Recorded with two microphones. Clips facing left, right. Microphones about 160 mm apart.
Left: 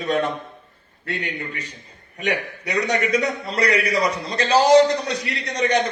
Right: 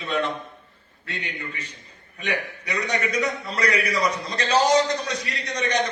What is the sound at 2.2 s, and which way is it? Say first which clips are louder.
A man's voice: left 4 dB; 35° left (ahead or behind).